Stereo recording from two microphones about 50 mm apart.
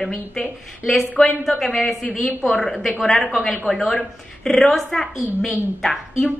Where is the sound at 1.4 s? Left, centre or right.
Centre.